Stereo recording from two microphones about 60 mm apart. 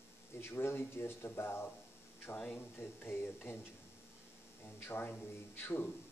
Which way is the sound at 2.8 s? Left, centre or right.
Left.